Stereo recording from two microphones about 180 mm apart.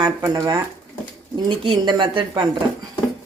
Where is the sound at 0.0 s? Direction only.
20° right (ahead or behind).